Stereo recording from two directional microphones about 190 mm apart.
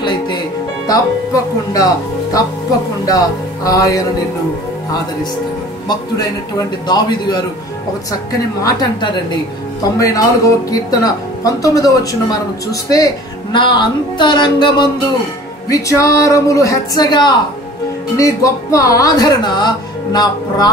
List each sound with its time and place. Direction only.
0.0 s music: 25° left (ahead or behind)
0.8 s speech: 20° left (ahead or behind)
3.1 s speech: 20° left (ahead or behind)
6.9 s speech: 20° left (ahead or behind)
8.6 s speech: 25° left (ahead or behind)